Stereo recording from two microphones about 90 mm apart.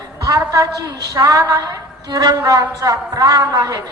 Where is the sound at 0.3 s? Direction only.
40° right (ahead or behind).